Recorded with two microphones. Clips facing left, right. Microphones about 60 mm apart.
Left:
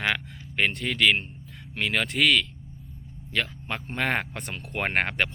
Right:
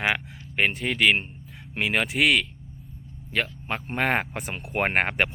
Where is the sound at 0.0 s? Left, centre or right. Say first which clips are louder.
Right 2 dB; centre.